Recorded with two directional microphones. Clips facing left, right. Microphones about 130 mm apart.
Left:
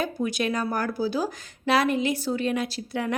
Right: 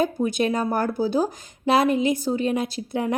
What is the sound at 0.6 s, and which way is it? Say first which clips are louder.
Speech: right 4 dB; 25° right (ahead or behind).